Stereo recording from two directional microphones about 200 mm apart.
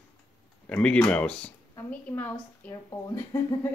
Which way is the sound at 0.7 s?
5° left (ahead or behind).